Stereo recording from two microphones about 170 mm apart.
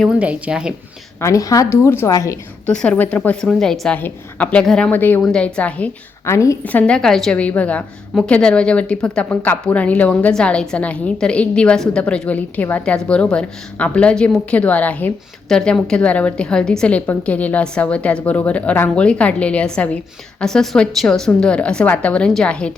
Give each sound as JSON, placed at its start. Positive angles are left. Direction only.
{"t": 0.2, "sound": "speech", "side_deg": -10}
{"t": 1.2, "sound": "a woman's voice", "side_deg": 20}
{"t": 2.6, "sound": "a woman's voice", "side_deg": 5}